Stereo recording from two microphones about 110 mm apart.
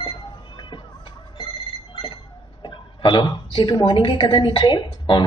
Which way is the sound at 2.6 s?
45° left (ahead or behind).